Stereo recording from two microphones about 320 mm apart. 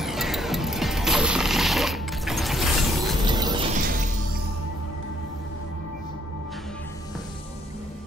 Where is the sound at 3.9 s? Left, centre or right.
Right.